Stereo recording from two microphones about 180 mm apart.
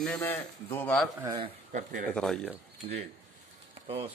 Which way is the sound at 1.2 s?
25° right (ahead or behind).